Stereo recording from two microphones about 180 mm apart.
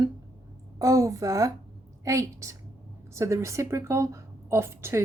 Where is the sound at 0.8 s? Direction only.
20° right (ahead or behind).